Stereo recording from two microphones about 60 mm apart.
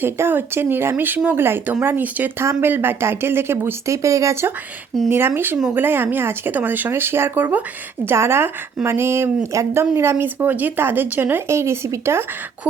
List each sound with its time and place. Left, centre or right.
0.0 s speech: right
2.4 s speech: right
3.8 s speech: right
5.0 s speech: right
8.0 s a woman's voice: right
11.4 s a woman's voice: right